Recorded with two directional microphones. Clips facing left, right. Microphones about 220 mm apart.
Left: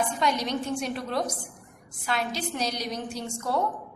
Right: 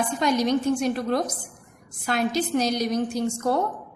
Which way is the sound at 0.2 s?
45° right (ahead or behind).